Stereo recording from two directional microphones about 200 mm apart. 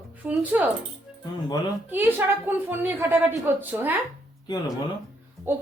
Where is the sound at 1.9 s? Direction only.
10° right (ahead or behind).